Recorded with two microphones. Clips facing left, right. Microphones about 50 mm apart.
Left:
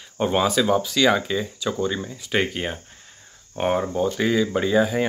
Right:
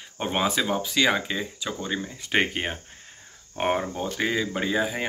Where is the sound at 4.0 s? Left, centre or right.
Centre.